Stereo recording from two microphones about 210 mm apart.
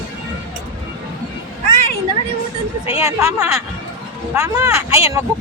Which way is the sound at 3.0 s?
15° right (ahead or behind).